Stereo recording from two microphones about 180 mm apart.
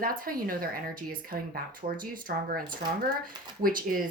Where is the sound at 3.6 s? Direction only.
50° right (ahead or behind).